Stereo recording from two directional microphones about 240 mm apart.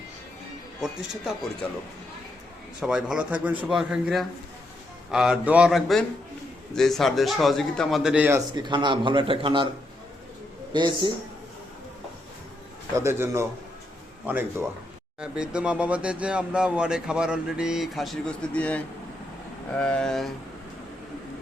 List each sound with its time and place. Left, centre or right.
0.8 s speech: centre
2.8 s speech: centre; by 9.6 s right
10.7 s speech: centre
13.0 s speech: centre